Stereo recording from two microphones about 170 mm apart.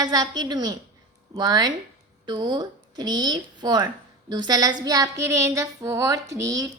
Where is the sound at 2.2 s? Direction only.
25° right (ahead or behind).